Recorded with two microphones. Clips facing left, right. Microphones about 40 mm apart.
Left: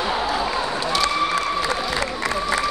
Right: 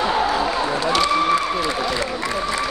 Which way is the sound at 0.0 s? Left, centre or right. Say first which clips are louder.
Right 3 dB; centre.